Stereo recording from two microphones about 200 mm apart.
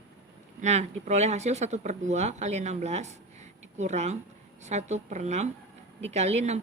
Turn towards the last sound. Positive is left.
turn(degrees=-35)  # may be behind; listen again after turning